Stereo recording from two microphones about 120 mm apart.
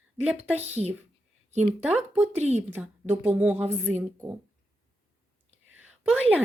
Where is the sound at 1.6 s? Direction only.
15° right (ahead or behind).